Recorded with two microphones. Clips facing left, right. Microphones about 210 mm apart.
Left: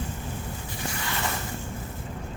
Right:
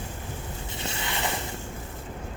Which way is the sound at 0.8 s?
25° right (ahead or behind).